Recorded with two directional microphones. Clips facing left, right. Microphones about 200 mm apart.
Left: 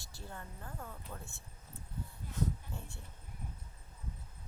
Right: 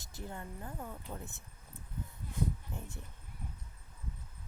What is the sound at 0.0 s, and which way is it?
Speech, 20° right (ahead or behind).